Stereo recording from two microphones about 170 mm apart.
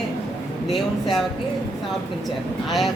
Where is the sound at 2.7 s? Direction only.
Centre (ahead or behind).